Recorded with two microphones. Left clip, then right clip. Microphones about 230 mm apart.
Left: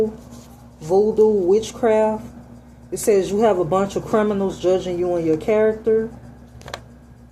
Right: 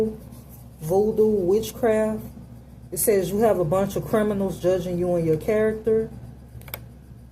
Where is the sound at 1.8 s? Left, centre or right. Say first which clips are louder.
Left 5 dB; left.